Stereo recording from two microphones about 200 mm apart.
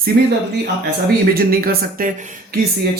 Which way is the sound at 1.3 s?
50° right (ahead or behind).